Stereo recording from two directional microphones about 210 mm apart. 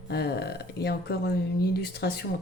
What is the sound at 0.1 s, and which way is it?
Speech, 50° left (ahead or behind).